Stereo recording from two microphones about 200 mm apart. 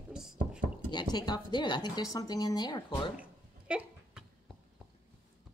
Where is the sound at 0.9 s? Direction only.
20° left (ahead or behind).